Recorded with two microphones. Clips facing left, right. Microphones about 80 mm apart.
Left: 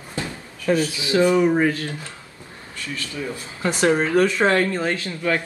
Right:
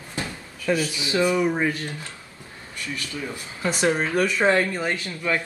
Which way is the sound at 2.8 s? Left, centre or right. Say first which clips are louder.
Left 2 dB; right.